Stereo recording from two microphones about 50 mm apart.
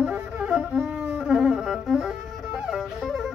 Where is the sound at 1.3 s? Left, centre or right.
Centre.